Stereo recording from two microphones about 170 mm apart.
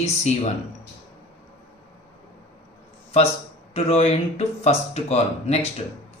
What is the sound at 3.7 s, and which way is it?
Speech, 35° left (ahead or behind).